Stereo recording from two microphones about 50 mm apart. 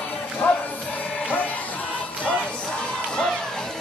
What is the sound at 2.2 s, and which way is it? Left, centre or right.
Crowd, left.